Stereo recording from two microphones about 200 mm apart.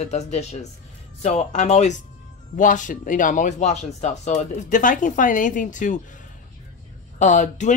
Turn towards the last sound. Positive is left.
turn(degrees=35)  # may be behind; listen again after turning